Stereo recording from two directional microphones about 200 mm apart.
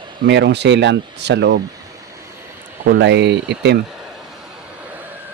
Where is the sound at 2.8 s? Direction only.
55° right (ahead or behind).